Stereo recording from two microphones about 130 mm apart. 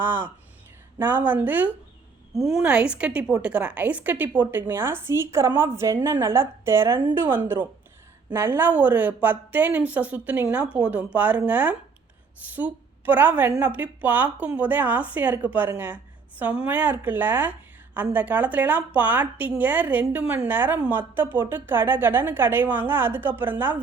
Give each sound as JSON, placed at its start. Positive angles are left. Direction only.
{"t": 0.0, "sound": "a woman's voice", "side_deg": -15}
{"t": 2.3, "sound": "a woman's voice", "side_deg": 0}